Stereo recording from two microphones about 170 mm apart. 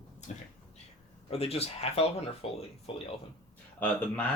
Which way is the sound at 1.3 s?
35° left (ahead or behind).